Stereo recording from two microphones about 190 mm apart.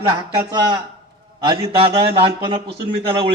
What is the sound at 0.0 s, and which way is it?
A man's voice, 20° right (ahead or behind).